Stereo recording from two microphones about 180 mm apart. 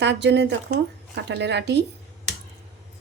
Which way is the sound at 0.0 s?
75° right (ahead or behind).